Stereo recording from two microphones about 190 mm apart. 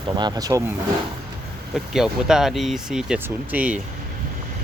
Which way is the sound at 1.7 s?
Centre (ahead or behind).